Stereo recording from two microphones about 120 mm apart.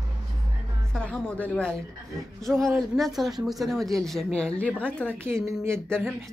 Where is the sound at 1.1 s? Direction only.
10° left (ahead or behind).